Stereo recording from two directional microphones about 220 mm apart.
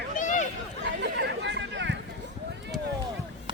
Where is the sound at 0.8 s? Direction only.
50° right (ahead or behind).